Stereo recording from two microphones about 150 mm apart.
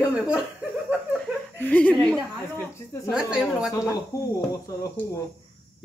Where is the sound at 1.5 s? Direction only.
10° left (ahead or behind).